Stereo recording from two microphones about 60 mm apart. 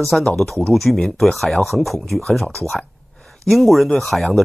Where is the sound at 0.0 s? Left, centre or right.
Centre.